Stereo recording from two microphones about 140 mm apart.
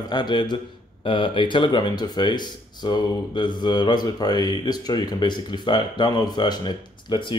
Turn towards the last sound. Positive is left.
turn(degrees=35)  # may be behind; listen again after turning